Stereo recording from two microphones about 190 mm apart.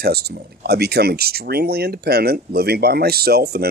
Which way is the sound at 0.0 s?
55° right (ahead or behind).